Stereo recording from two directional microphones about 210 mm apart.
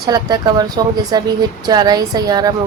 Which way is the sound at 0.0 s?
20° right (ahead or behind).